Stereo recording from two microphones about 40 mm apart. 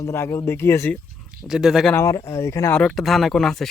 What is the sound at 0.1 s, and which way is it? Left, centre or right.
Speech, left.